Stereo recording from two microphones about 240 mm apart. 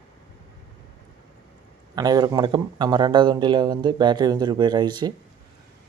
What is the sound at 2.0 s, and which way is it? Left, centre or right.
Speech, centre.